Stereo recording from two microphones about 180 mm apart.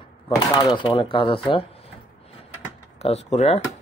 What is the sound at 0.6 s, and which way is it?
Speech, 25° left (ahead or behind).